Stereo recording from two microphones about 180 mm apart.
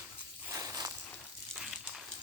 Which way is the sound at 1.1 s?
Centre (ahead or behind).